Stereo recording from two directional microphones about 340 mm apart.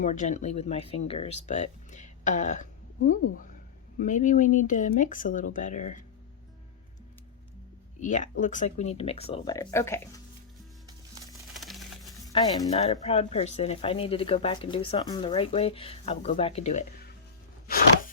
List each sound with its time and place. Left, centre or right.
0.0 s speech: left
4.0 s speech: left
8.0 s speech: left
11.5 s music: centre
12.2 s speech: centre